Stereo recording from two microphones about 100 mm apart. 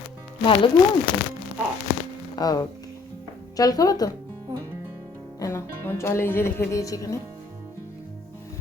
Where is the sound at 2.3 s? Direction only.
40° left (ahead or behind).